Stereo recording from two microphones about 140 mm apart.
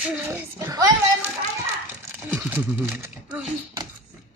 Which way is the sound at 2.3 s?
15° right (ahead or behind).